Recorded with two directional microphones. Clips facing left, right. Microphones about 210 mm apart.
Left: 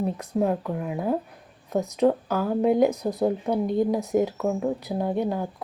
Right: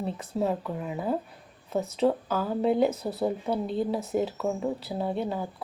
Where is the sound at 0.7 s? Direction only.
10° left (ahead or behind).